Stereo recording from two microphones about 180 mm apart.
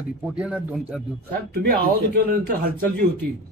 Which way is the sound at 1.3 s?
60° right (ahead or behind).